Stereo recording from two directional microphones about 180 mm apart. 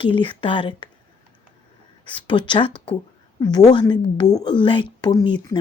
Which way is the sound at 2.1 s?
25° left (ahead or behind).